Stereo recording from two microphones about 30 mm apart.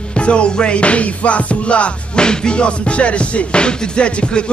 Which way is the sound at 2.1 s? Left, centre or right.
Left.